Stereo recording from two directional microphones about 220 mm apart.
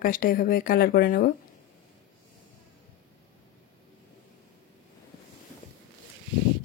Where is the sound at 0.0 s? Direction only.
40° left (ahead or behind).